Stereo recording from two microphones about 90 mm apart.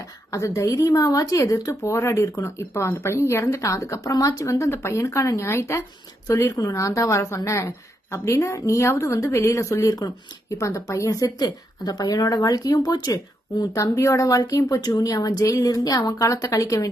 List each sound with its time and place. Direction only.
0.0 s a woman's voice: 35° left (ahead or behind)